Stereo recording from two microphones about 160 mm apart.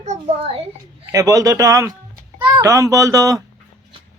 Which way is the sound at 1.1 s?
20° right (ahead or behind).